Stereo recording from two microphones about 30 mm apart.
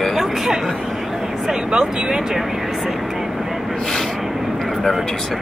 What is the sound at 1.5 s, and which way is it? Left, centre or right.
Speech, right.